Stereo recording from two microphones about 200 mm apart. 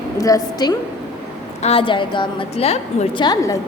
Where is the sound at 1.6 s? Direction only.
30° left (ahead or behind).